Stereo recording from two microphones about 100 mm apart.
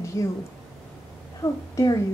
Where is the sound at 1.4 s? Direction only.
25° left (ahead or behind).